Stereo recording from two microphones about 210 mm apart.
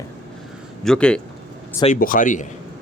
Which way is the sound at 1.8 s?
40° left (ahead or behind).